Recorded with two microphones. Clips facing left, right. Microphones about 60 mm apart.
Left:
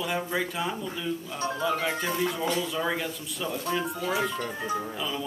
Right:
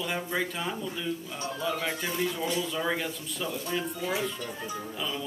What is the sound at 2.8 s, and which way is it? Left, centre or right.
Speech, centre.